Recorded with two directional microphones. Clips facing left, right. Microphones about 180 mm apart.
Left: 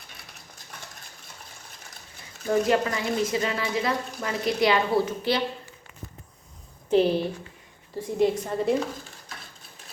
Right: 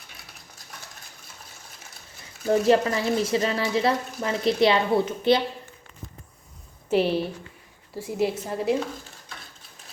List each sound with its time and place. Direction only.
2.6 s speech: 30° right (ahead or behind)
6.9 s a woman's voice: 5° right (ahead or behind)